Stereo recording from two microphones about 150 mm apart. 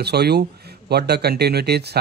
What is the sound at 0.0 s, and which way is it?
Speech, 90° right.